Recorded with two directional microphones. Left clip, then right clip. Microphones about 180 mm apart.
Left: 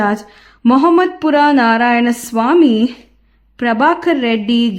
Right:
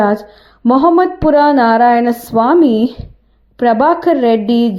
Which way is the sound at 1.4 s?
30° left (ahead or behind).